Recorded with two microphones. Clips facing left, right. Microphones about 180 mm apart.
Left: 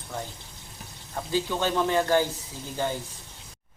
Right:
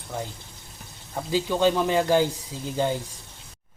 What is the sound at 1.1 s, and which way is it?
Speech, 15° right (ahead or behind).